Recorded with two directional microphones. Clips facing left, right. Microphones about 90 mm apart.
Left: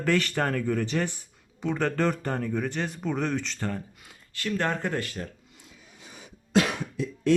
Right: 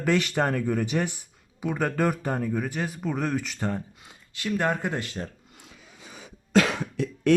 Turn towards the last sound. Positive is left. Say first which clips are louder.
# right 2 dB
turn(degrees=-70)  # may be behind; listen again after turning